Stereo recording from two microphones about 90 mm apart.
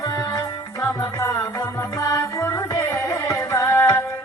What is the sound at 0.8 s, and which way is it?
Music, 30° left (ahead or behind).